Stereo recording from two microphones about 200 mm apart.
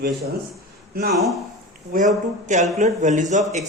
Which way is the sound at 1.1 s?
Centre (ahead or behind).